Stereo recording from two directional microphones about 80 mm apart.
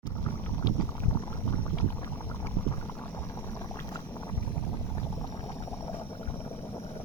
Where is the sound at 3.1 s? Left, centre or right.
Left.